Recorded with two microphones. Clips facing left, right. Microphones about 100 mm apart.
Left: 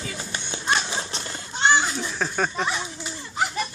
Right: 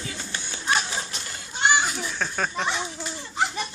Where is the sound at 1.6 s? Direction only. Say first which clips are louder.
Left 2 dB; 10° right (ahead or behind).